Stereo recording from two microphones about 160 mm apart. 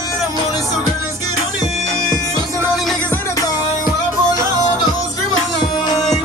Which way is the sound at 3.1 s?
20° left (ahead or behind).